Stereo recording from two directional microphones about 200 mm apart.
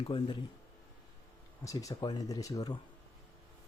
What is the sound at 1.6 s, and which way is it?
Speech, 15° left (ahead or behind).